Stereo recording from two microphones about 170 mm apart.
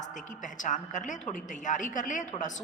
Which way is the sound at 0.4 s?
45° left (ahead or behind).